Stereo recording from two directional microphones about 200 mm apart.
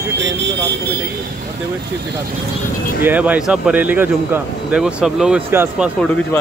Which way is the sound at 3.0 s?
10° right (ahead or behind).